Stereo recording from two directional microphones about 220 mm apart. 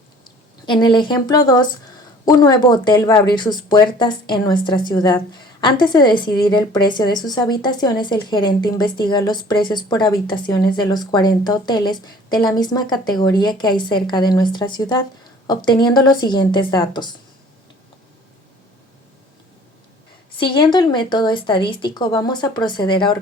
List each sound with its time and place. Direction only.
0.6 s a woman's voice: 20° left (ahead or behind)
20.4 s a woman's voice: 20° left (ahead or behind)